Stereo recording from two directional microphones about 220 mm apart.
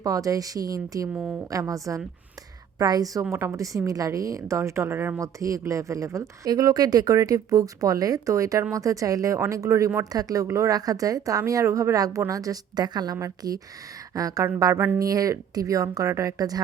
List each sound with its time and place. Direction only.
0.0 s a woman's voice: 15° right (ahead or behind)
1.1 s a woman's voice: centre (ahead or behind)
1.5 s a woman's voice: 15° right (ahead or behind)